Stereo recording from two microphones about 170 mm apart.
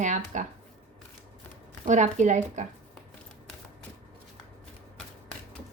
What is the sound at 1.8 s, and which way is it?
Speech, 45° right (ahead or behind).